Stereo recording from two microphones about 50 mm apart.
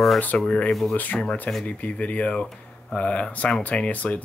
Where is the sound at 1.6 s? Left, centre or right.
Left.